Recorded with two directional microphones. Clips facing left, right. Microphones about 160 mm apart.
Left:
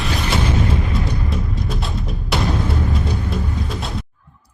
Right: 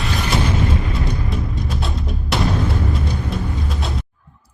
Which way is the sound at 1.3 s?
Centre (ahead or behind).